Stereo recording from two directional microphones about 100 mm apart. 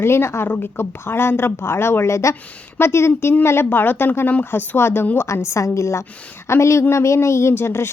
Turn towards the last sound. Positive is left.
turn(degrees=25)  # may be behind; listen again after turning